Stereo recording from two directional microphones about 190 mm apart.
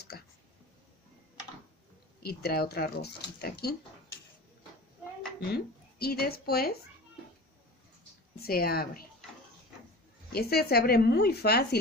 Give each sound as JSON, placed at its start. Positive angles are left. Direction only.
{"t": 2.2, "sound": "a woman's voice", "side_deg": 55}
{"t": 5.4, "sound": "speech", "side_deg": 55}
{"t": 8.4, "sound": "speech", "side_deg": 55}
{"t": 10.3, "sound": "a woman's voice", "side_deg": 55}